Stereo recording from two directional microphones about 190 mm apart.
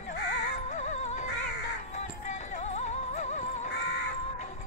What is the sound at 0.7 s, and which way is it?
Music, 35° left (ahead or behind).